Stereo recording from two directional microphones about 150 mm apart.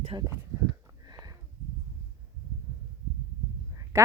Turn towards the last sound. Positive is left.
turn(degrees=-20)  # may be behind; listen again after turning